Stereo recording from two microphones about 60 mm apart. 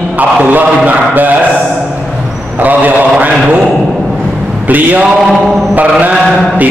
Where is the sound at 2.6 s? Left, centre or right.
Right.